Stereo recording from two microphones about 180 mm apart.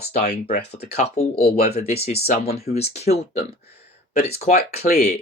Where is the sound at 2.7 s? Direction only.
35° left (ahead or behind).